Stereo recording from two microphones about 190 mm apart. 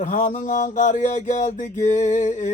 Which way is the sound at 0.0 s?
40° left (ahead or behind).